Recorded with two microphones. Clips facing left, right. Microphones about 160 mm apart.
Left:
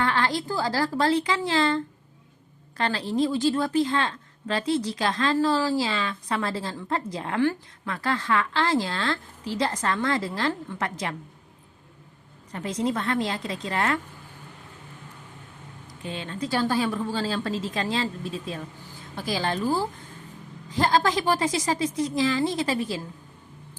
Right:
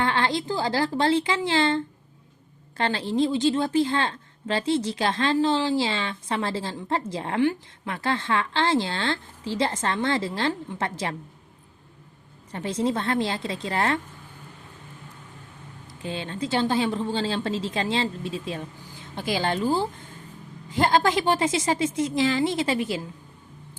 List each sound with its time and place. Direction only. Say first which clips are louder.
0.0 s a woman's voice: right 1 dB; 25° right (ahead or behind)
12.5 s a woman's voice: right 1 dB; 30° right (ahead or behind)
15.9 s a woman's voice: right 2 dB; 30° right (ahead or behind)
20.7 s a woman's voice: right 1 dB; 25° right (ahead or behind)